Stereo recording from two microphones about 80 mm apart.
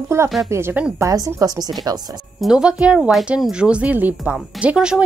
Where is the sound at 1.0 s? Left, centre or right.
Right.